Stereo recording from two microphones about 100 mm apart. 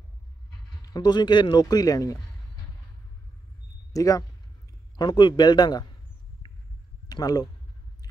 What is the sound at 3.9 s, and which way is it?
Speech, 35° left (ahead or behind).